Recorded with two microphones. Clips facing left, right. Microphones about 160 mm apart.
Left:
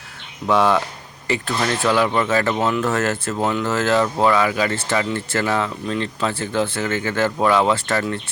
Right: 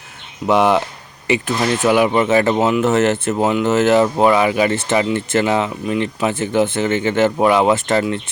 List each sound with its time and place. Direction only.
0.4 s speech: 20° right (ahead or behind)